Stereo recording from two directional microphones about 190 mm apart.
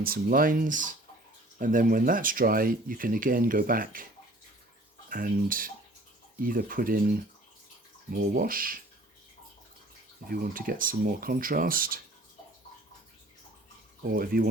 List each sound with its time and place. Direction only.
0.0 s speech: 50° right (ahead or behind)
5.0 s speech: 50° right (ahead or behind)
8.1 s speech: 45° right (ahead or behind)
10.2 s speech: 50° right (ahead or behind)
14.0 s speech: 50° right (ahead or behind)